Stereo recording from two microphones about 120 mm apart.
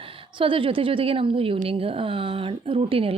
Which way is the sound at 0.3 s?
45° right (ahead or behind).